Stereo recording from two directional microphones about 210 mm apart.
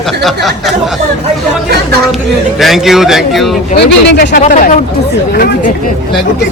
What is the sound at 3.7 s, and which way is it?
Speech, 55° left (ahead or behind).